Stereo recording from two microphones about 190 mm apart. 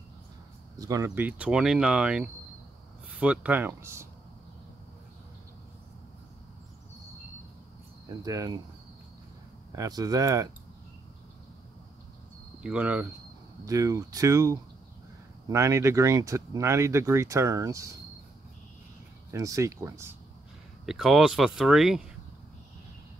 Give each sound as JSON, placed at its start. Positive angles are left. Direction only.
{"t": 0.7, "sound": "speech", "side_deg": -20}
{"t": 8.3, "sound": "speech", "side_deg": -15}
{"t": 9.7, "sound": "speech", "side_deg": -20}
{"t": 12.6, "sound": "speech", "side_deg": -5}
{"t": 19.3, "sound": "speech", "side_deg": -15}
{"t": 20.8, "sound": "speech", "side_deg": 0}